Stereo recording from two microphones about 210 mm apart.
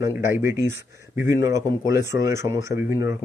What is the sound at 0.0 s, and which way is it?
Speech, 10° right (ahead or behind).